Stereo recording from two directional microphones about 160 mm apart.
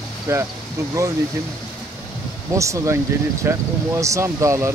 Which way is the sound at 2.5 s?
20° right (ahead or behind).